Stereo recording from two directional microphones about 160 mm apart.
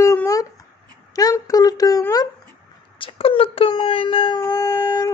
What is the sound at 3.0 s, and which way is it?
Speech, 35° left (ahead or behind).